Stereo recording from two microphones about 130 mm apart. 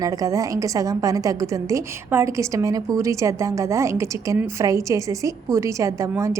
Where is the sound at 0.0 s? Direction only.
25° right (ahead or behind).